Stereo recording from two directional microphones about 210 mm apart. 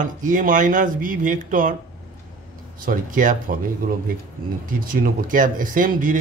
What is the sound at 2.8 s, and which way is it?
Speech, 40° right (ahead or behind).